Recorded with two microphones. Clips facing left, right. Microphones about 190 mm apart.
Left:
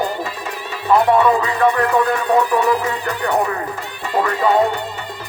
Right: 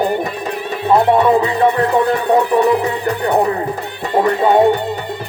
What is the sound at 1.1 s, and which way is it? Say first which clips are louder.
Music: right 3 dB; 25° right (ahead or behind).